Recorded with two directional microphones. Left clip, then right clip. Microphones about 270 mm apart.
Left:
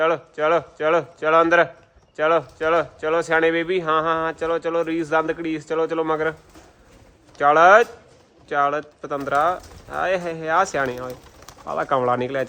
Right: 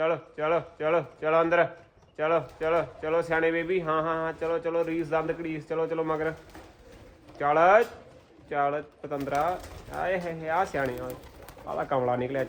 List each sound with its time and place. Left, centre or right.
0.0 s speech: left
7.3 s speech: left